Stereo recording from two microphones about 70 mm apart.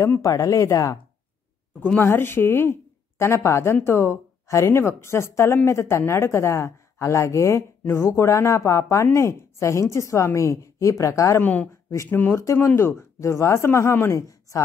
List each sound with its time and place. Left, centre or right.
0.2 s speech: left
2.0 s a woman's voice: left
11.4 s a woman's voice: left